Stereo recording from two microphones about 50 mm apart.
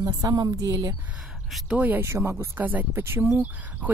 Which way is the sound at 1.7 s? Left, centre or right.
Right.